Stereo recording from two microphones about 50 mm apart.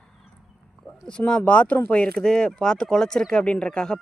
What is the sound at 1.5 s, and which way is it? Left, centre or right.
Speech, left.